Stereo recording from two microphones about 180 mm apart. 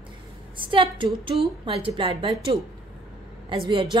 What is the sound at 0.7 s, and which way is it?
A woman's voice, 30° right (ahead or behind).